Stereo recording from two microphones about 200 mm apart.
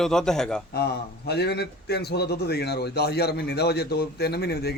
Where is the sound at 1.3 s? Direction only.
55° left (ahead or behind).